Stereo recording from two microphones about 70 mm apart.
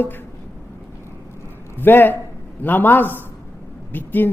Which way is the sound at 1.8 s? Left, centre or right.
Left.